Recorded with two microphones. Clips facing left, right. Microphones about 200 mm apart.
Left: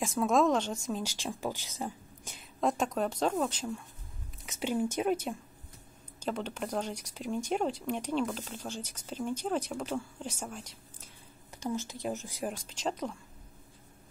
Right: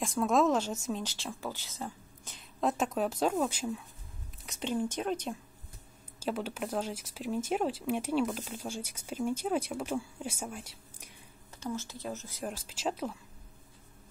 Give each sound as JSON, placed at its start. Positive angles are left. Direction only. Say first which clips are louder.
{"t": 0.0, "sound": "speech", "louder": "left 1 dB", "side_deg": 0}
{"t": 1.0, "sound": "speech", "louder": "left 3 dB", "side_deg": 15}
{"t": 2.6, "sound": "speech", "louder": "even", "side_deg": -5}
{"t": 4.5, "sound": "speech", "louder": "left 2 dB", "side_deg": 10}
{"t": 6.1, "sound": "speech", "louder": "right 1 dB", "side_deg": -5}
{"t": 11.6, "sound": "speech", "louder": "left 3 dB", "side_deg": 15}
{"t": 12.4, "sound": "speech", "louder": "even", "side_deg": -5}